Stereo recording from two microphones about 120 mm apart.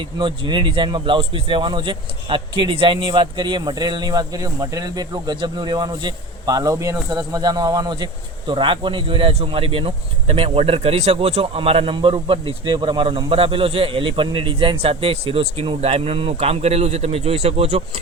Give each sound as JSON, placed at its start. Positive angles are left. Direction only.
{"t": 0.2, "sound": "speech", "side_deg": -40}